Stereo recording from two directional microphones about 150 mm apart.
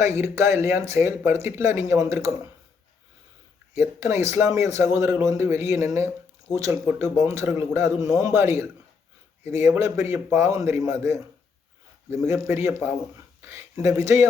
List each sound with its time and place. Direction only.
0.0 s speech: 20° right (ahead or behind)
3.8 s speech: 20° right (ahead or behind)